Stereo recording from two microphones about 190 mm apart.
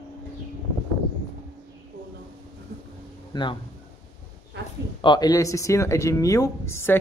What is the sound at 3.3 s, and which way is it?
Speech, 25° left (ahead or behind).